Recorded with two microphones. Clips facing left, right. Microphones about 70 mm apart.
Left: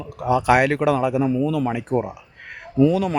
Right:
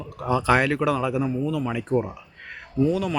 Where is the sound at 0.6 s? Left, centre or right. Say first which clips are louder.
Left 4 dB; left.